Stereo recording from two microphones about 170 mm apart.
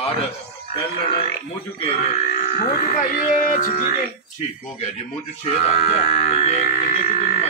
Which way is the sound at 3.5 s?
50° left (ahead or behind).